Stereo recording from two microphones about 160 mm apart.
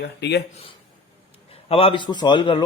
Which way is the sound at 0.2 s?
90° left.